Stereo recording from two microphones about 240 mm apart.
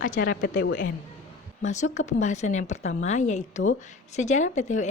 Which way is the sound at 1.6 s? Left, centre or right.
Left.